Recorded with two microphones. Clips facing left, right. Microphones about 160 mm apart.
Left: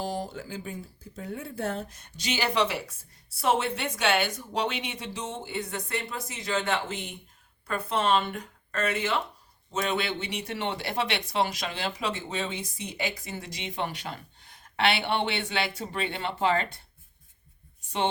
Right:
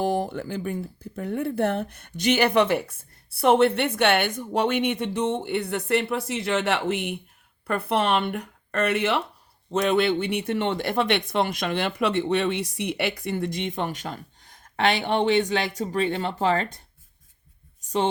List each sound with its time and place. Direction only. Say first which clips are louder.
0.0 s speech: right 8 dB; 55° right (ahead or behind)
17.8 s speech: right 4 dB; 40° right (ahead or behind)